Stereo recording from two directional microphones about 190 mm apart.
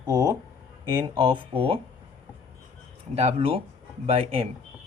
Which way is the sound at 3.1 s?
30° right (ahead or behind).